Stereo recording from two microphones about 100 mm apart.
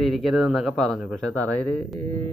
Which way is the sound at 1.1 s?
15° left (ahead or behind).